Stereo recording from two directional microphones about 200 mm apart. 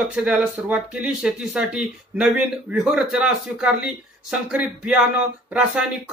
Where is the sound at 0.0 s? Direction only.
Centre (ahead or behind).